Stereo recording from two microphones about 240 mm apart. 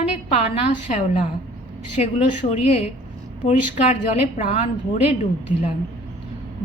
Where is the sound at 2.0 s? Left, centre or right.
Left.